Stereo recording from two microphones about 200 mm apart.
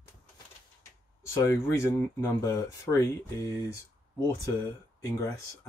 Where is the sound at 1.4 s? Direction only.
15° left (ahead or behind).